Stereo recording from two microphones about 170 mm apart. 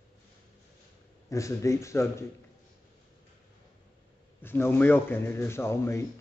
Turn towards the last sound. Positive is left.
turn(degrees=15)  # may be behind; listen again after turning